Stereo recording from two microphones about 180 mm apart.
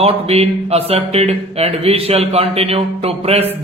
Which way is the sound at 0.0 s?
35° right (ahead or behind).